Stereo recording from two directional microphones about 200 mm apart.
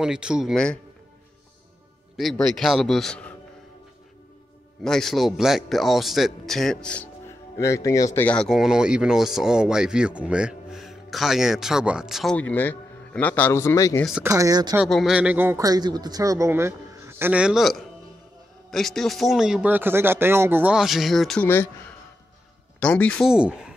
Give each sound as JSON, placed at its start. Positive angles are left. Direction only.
{"t": 0.0, "sound": "speech", "side_deg": -5}
{"t": 2.1, "sound": "speech", "side_deg": 0}
{"t": 4.8, "sound": "speech", "side_deg": 0}
{"t": 7.5, "sound": "speech", "side_deg": 15}
{"t": 14.2, "sound": "speech", "side_deg": -15}
{"t": 14.8, "sound": "speech", "side_deg": 0}